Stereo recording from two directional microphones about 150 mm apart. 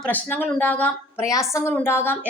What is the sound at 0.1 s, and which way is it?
A woman's voice, 10° left (ahead or behind).